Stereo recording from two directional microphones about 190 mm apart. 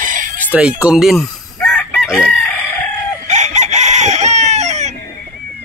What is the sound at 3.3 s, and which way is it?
Chicken, 40° right (ahead or behind).